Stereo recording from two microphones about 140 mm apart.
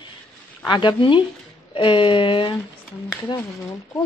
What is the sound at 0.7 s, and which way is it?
Speech, 35° left (ahead or behind).